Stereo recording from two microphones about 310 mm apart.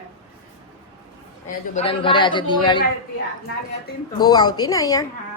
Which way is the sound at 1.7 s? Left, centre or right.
Centre.